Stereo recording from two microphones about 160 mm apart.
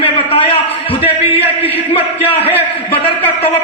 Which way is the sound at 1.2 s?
10° right (ahead or behind).